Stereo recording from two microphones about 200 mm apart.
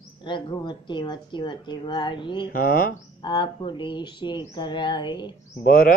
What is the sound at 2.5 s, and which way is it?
Speech, 45° left (ahead or behind).